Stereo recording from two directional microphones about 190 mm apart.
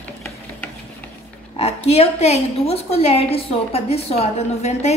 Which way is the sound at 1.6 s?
30° left (ahead or behind).